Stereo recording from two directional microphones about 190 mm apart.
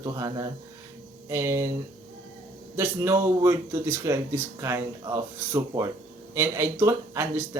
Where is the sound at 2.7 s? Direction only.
15° right (ahead or behind).